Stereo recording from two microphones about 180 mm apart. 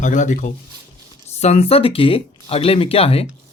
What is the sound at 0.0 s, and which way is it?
A woman's voice, 45° left (ahead or behind).